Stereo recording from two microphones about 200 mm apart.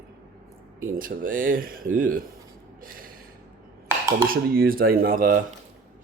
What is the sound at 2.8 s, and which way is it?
Gasp, 45° right (ahead or behind).